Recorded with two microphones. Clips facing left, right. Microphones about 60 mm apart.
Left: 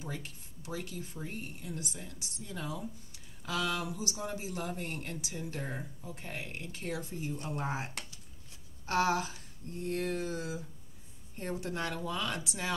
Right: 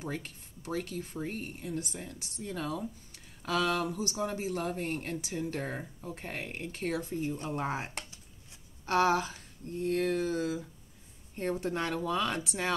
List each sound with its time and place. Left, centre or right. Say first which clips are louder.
0.0 s speech: right 4 dB; right
1.7 s speech: right 6 dB; right
2.1 s speech: right 8 dB; right
3.1 s a sound: right 6 dB; right
3.9 s speech: right 4 dB; right
11.6 s speech: right 4 dB; right